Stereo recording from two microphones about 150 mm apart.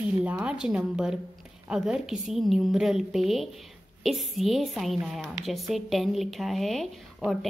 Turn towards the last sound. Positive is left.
turn(degrees=0)  # may be behind; listen again after turning